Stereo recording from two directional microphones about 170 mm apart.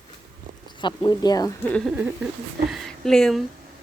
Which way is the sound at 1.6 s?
5° left (ahead or behind).